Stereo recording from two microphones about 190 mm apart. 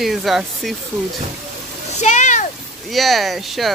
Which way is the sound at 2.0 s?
40° left (ahead or behind).